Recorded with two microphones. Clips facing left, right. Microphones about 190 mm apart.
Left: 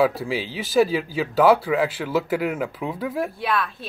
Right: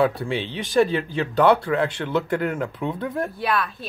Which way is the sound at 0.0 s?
5° left (ahead or behind).